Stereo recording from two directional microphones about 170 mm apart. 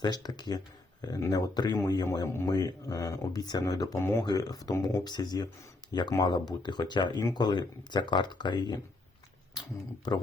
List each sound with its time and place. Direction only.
0.0 s speech: 25° left (ahead or behind)